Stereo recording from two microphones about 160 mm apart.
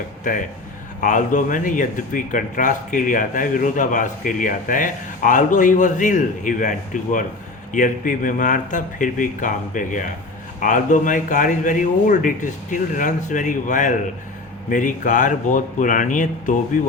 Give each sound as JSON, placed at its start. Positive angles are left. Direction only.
{"t": 1.0, "sound": "speech", "side_deg": 55}